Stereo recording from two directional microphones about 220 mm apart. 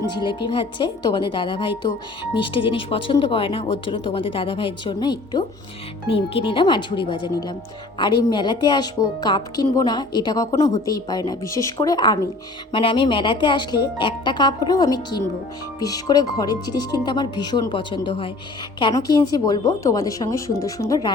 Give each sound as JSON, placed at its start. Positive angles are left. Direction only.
{"t": 0.1, "sound": "a woman's voice", "side_deg": 20}